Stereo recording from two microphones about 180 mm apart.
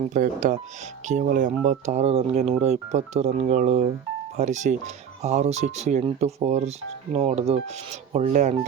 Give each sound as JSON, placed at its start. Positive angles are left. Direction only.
{"t": 0.1, "sound": "speech", "side_deg": -45}